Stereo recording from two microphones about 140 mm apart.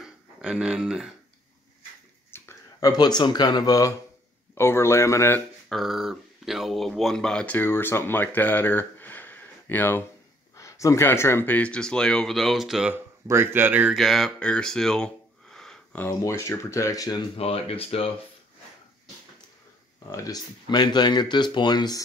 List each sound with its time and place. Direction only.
0.0 s a sound: 5° right (ahead or behind)
2.3 s a sound: 15° left (ahead or behind)
2.9 s speech: 30° left (ahead or behind)
5.7 s speech: centre (ahead or behind)
12.9 s speech: 15° right (ahead or behind)
13.9 s speech: centre (ahead or behind); by 17.2 s 25° left (ahead or behind)
17.4 s speech: 45° left (ahead or behind)
20.1 s speech: 25° left (ahead or behind)